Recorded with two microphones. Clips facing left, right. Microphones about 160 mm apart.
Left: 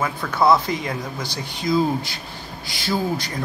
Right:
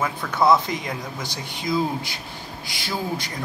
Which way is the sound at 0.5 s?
20° right (ahead or behind).